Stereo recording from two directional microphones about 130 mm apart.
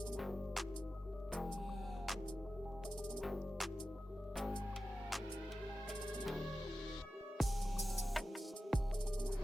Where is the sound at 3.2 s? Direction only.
Centre (ahead or behind).